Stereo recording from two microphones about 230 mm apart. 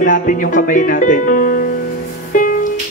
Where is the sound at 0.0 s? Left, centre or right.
Left.